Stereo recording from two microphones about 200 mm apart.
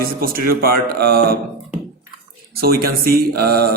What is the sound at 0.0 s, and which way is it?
Speech, 45° right (ahead or behind).